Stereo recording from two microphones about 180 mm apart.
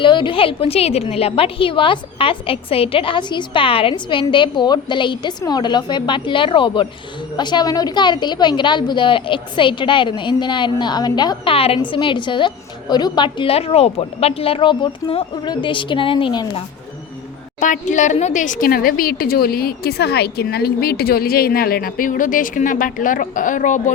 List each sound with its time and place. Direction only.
0.0 s a woman's voice: 25° left (ahead or behind)
17.6 s speech: 45° left (ahead or behind)